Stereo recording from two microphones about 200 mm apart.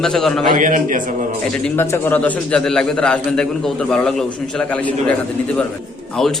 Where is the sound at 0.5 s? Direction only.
40° right (ahead or behind).